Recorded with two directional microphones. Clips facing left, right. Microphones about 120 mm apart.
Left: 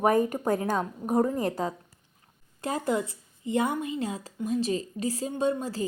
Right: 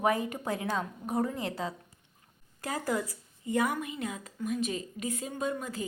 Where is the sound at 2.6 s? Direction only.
25° left (ahead or behind).